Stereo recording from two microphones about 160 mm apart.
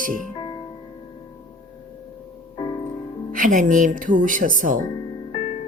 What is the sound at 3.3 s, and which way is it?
Speech, 55° right (ahead or behind).